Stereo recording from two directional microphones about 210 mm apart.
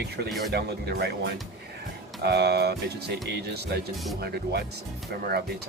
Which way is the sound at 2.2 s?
50° right (ahead or behind).